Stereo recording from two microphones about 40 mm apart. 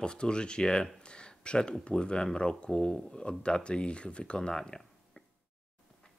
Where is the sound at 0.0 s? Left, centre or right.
Left.